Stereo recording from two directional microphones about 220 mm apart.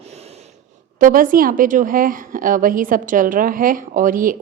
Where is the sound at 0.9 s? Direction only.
40° right (ahead or behind).